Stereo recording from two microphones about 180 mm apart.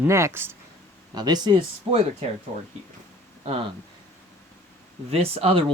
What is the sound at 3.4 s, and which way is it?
Speech, 30° right (ahead or behind).